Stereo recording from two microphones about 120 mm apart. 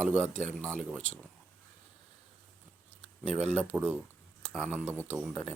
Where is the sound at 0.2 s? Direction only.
90° right.